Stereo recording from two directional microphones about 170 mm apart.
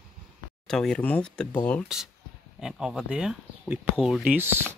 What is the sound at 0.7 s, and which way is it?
Speech, 5° left (ahead or behind).